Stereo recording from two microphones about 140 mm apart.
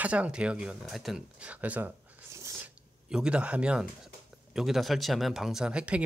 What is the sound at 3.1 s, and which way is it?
Speech, 5° right (ahead or behind).